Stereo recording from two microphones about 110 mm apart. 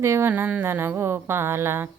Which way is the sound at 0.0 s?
25° right (ahead or behind).